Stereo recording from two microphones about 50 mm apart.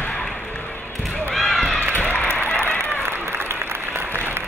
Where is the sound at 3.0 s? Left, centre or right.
Right.